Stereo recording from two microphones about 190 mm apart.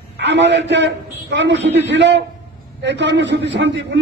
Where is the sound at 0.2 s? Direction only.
65° right (ahead or behind).